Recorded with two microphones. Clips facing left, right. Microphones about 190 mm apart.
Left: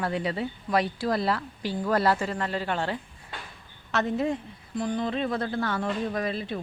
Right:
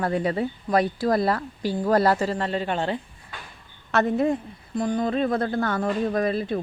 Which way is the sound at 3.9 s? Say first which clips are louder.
Right 5 dB; 55° right (ahead or behind).